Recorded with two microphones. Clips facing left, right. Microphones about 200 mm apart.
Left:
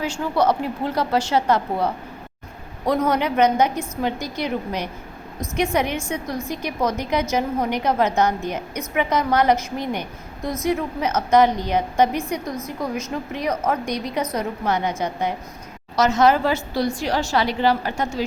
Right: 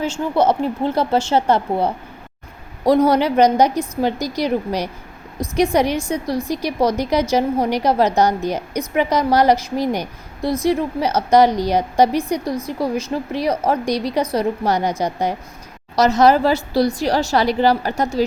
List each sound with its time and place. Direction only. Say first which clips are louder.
0.0 s a woman's voice: right 3 dB; 25° right (ahead or behind)